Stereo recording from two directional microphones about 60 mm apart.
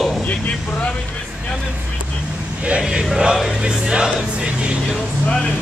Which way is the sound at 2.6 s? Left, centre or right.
Centre.